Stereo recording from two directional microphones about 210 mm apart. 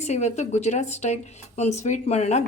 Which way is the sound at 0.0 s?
30° left (ahead or behind).